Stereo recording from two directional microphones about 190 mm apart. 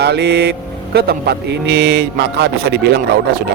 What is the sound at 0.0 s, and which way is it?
Speech, 60° right (ahead or behind).